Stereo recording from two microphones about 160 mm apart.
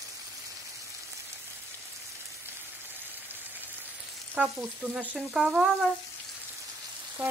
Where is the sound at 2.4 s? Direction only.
10° right (ahead or behind).